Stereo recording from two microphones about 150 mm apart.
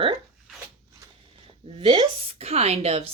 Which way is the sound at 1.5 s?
35° right (ahead or behind).